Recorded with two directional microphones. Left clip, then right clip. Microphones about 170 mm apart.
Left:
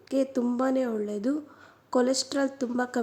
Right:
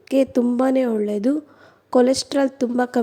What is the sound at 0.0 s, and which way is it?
Speech, 40° right (ahead or behind).